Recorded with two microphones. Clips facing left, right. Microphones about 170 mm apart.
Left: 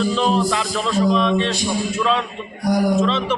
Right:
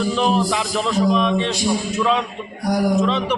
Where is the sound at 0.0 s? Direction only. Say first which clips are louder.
Even; 15° right (ahead or behind).